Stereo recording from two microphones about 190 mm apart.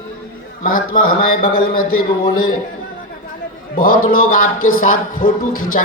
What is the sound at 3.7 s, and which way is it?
A man's voice, 50° left (ahead or behind).